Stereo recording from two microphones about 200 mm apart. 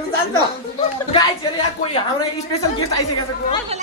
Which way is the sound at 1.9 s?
20° left (ahead or behind).